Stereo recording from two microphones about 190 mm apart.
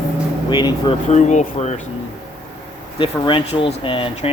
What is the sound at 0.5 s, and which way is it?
Speech, 25° left (ahead or behind).